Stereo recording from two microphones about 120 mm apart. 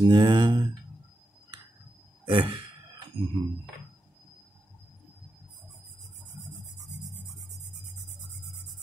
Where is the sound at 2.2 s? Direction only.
45° right (ahead or behind).